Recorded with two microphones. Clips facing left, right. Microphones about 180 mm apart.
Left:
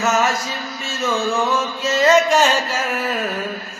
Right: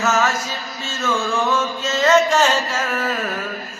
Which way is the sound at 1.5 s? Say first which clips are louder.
Left 2 dB; 10° left (ahead or behind).